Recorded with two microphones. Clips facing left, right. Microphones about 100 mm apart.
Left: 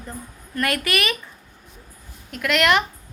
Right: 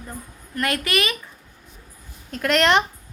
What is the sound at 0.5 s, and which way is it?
Speech, 20° right (ahead or behind).